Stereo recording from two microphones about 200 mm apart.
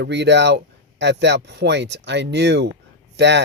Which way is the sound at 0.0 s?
60° right (ahead or behind).